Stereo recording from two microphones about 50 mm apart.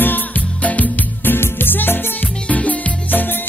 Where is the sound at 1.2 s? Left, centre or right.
Left.